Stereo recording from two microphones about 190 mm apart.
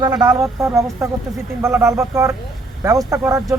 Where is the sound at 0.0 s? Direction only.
20° right (ahead or behind).